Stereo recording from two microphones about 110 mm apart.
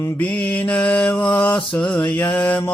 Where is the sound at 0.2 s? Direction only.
15° left (ahead or behind).